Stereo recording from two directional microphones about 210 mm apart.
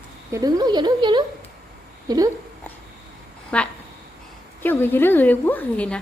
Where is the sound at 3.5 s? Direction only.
5° left (ahead or behind).